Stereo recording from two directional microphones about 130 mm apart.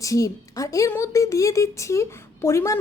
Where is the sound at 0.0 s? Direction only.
25° left (ahead or behind).